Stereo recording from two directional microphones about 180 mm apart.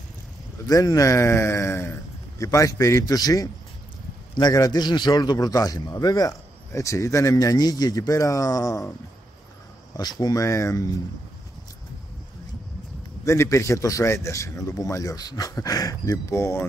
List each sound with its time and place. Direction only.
0.7 s a man's voice: 20° left (ahead or behind)
9.9 s a man's voice: 20° left (ahead or behind)
13.2 s a man's voice: 15° left (ahead or behind)